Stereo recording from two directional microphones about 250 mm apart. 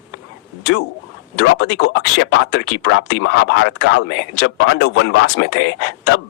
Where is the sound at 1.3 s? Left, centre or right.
Left.